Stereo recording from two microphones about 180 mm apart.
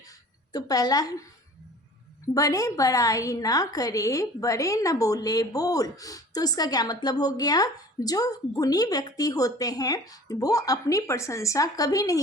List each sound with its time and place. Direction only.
0.5 s a woman's voice: 20° left (ahead or behind)
2.2 s a woman's voice: 20° left (ahead or behind)